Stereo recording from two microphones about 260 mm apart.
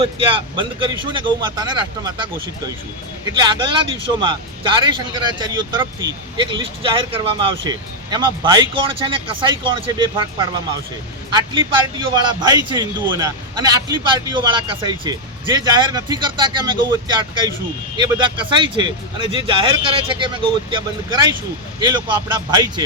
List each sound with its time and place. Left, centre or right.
0.0 s speech: centre